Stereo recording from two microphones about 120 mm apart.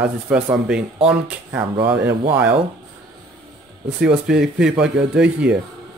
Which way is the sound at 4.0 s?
5° right (ahead or behind).